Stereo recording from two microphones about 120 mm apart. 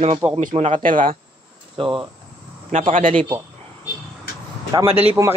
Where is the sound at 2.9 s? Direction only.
90° right.